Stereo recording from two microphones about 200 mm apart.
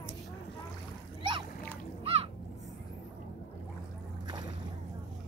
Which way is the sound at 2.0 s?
30° right (ahead or behind).